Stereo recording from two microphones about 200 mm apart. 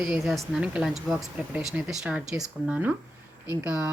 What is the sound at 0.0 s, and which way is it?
Speech, centre (ahead or behind).